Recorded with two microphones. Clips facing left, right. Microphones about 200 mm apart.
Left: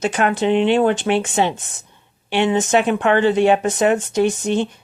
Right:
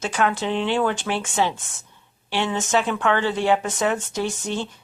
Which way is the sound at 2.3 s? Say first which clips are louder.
Left 6 dB; 15° left (ahead or behind).